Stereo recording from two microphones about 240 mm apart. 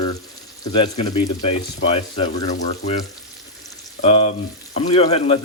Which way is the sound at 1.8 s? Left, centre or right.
Left.